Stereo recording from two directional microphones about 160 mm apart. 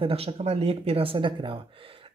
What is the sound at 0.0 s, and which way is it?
Speech, 35° right (ahead or behind).